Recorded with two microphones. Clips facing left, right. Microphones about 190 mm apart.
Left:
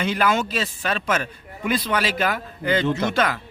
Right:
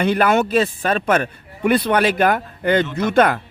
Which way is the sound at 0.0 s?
60° right (ahead or behind).